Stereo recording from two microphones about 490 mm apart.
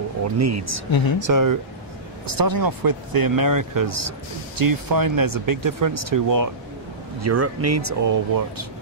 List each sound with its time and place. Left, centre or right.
0.4 s speech: right